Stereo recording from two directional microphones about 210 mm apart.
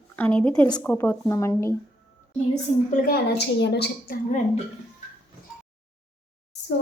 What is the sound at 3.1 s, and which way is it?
A woman's voice, 50° left (ahead or behind).